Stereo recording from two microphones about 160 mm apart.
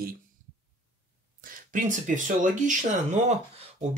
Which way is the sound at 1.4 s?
55° right (ahead or behind).